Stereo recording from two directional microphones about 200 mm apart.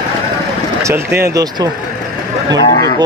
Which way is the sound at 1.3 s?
20° right (ahead or behind).